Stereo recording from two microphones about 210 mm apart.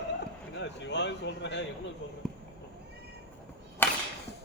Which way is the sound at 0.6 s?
55° left (ahead or behind).